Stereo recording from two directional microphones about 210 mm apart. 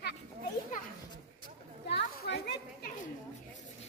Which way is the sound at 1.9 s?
50° left (ahead or behind).